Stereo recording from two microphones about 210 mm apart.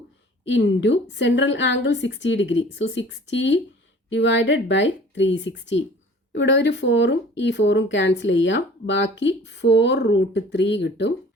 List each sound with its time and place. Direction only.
0.4 s speech: 60° left (ahead or behind)